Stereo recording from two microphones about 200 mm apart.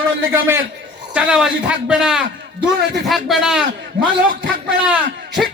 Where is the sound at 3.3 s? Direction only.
Centre (ahead or behind).